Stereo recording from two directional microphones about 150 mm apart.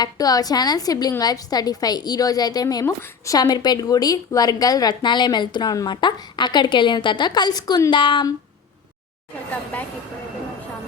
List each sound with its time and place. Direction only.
0.0 s a woman's voice: 25° left (ahead or behind)